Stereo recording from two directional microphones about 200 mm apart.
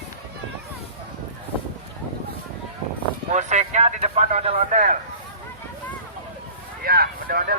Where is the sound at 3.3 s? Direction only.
35° right (ahead or behind).